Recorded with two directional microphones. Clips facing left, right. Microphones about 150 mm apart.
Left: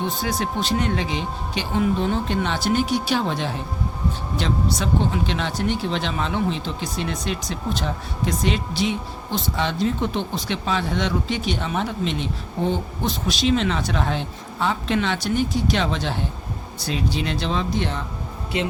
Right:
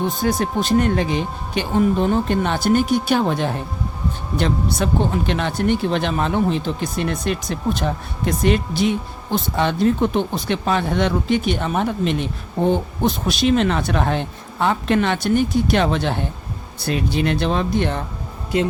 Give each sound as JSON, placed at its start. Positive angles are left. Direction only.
{"t": 0.2, "sound": "speech", "side_deg": -50}